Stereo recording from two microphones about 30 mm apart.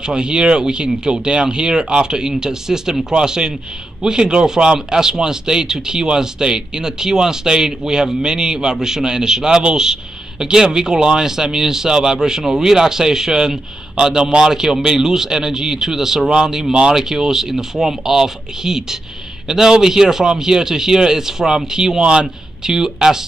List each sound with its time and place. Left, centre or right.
0.0 s a man's voice: right
22.0 s speech: right
22.7 s speech: centre